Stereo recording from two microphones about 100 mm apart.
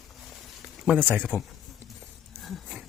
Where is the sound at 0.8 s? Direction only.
15° right (ahead or behind).